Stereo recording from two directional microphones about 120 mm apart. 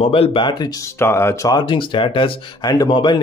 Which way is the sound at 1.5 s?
40° left (ahead or behind).